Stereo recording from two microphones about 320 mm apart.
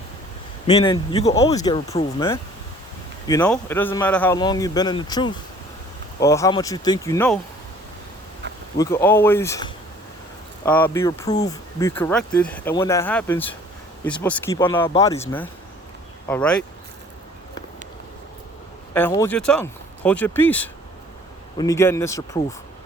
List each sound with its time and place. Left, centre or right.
0.7 s speech: centre
8.8 s speech: centre
18.9 s speech: centre